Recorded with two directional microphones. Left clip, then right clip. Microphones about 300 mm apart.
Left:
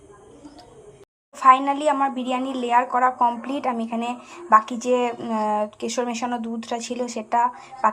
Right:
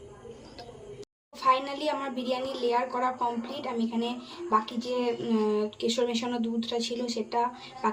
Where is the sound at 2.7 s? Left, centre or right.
Left.